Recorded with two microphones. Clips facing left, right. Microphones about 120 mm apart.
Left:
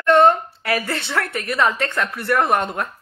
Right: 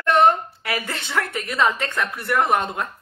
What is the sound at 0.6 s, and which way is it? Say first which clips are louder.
Speech: left 5 dB; 20° right (ahead or behind).